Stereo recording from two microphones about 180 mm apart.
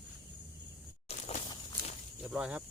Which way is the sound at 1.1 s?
40° left (ahead or behind).